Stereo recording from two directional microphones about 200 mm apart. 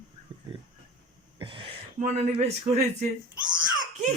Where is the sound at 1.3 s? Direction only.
25° right (ahead or behind).